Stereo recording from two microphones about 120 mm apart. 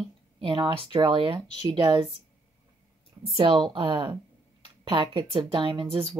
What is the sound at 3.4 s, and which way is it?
Speech, 50° right (ahead or behind).